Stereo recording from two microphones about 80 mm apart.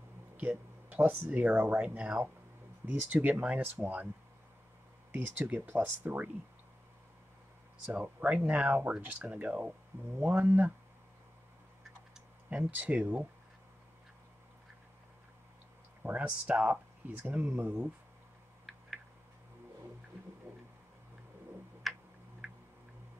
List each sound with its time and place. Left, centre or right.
0.4 s speech: right
5.1 s speech: right
7.8 s speech: centre
12.4 s speech: centre
16.0 s speech: centre
17.3 s speech: right
21.8 s tick: centre